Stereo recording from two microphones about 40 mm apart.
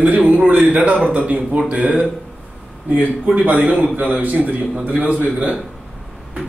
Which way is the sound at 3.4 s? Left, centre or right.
Right.